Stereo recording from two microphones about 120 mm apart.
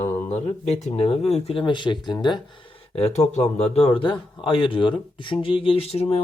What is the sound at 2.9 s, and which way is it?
Speech, 60° left (ahead or behind).